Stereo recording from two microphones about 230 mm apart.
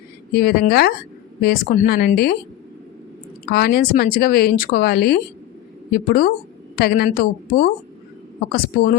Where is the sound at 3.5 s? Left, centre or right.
Left.